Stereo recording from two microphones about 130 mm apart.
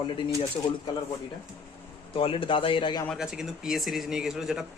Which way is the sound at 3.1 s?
5° right (ahead or behind).